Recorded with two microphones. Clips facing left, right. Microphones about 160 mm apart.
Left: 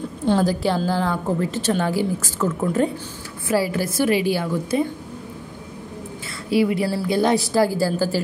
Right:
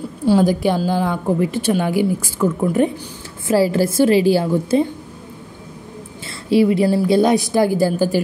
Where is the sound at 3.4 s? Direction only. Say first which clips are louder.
Right 6 dB; 30° right (ahead or behind).